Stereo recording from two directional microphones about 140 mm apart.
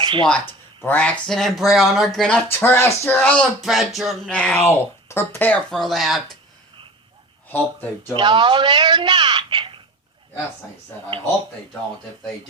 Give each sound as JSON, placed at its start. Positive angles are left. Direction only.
{"t": 0.0, "sound": "a sound", "side_deg": -35}
{"t": 0.3, "sound": "speech", "side_deg": 15}
{"t": 2.5, "sound": "speech", "side_deg": 15}
{"t": 3.6, "sound": "speech", "side_deg": 0}
{"t": 5.7, "sound": "speech", "side_deg": 0}
{"t": 7.4, "sound": "speech", "side_deg": 15}
{"t": 8.1, "sound": "speech", "side_deg": -35}